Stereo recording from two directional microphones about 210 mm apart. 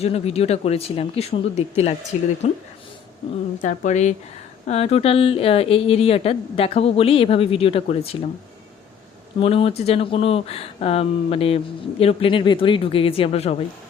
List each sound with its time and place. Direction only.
0.0 s speech: 30° left (ahead or behind)
3.6 s speech: 35° left (ahead or behind)
9.4 s speech: 25° left (ahead or behind)